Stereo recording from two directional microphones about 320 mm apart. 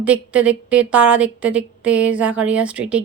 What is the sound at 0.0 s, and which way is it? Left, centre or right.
A woman's voice, centre.